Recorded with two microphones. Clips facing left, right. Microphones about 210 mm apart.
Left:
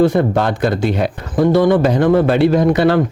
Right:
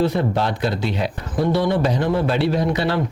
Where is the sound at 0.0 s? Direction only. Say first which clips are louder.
Left 6 dB; 50° left (ahead or behind).